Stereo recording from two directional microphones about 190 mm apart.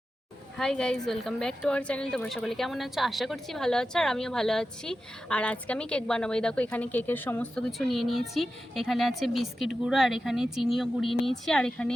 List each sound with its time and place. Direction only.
0.5 s a woman's voice: 5° left (ahead or behind)